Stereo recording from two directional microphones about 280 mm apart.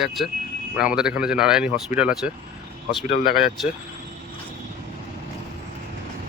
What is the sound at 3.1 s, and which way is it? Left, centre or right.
Speech, left.